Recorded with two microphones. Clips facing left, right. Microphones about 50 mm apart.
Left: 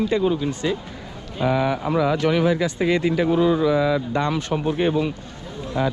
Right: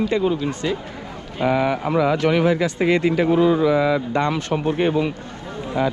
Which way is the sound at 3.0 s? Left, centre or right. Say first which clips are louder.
Right 2 dB; right.